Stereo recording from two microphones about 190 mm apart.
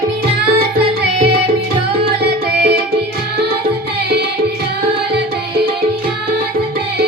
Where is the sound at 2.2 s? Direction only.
60° right (ahead or behind).